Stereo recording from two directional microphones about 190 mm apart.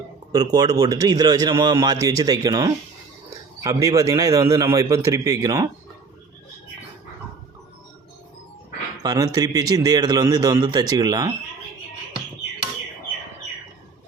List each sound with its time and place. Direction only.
0.3 s a man's voice: 20° right (ahead or behind)
9.0 s a man's voice: 20° right (ahead or behind)